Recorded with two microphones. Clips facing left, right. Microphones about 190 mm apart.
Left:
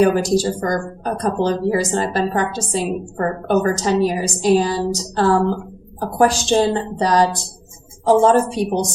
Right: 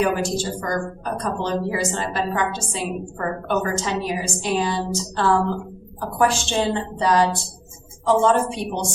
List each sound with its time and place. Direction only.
0.0 s a woman's voice: 40° left (ahead or behind)